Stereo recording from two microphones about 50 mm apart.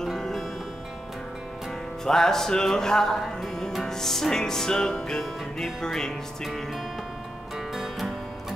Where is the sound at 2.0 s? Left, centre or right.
Centre.